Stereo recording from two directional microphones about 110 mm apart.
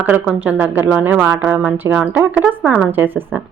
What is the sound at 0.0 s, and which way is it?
Speech, 15° right (ahead or behind).